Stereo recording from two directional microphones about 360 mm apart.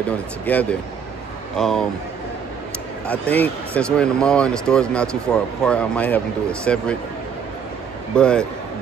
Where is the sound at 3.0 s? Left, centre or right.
Centre.